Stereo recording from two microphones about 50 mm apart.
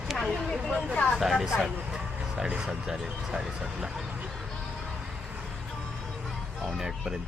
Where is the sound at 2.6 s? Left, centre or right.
Centre.